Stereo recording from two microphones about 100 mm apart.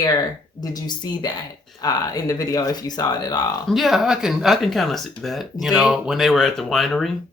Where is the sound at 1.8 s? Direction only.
40° left (ahead or behind).